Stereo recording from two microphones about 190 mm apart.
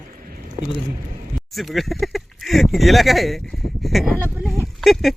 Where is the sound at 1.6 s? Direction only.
Centre (ahead or behind).